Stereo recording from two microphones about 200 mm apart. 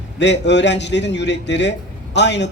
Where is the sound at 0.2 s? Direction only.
60° left (ahead or behind).